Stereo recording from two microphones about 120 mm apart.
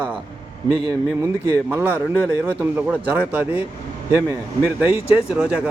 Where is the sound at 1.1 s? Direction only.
20° right (ahead or behind).